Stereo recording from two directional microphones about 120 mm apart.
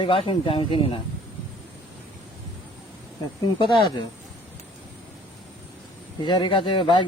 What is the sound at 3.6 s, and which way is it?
Speech, 40° left (ahead or behind).